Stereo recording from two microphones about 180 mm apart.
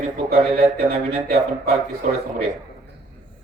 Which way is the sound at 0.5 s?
35° right (ahead or behind).